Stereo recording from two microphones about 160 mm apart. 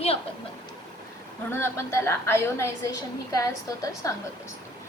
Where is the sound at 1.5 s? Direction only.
15° left (ahead or behind).